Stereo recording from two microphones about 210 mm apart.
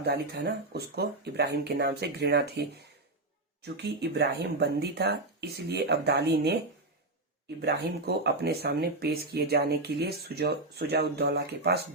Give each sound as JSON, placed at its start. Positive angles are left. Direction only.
{"t": 0.0, "sound": "speech", "side_deg": -50}
{"t": 7.6, "sound": "speech", "side_deg": -50}